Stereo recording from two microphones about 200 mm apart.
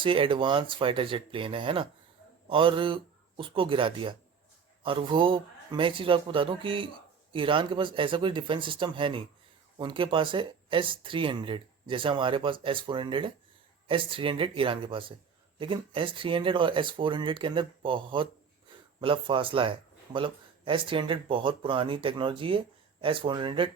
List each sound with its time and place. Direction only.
0.0 s speech: 25° right (ahead or behind)